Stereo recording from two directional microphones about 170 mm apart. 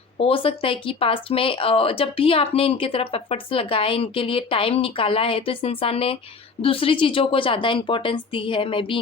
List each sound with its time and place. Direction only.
0.2 s speech: 35° left (ahead or behind)